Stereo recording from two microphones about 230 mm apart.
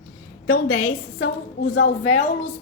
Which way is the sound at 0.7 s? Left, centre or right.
Left.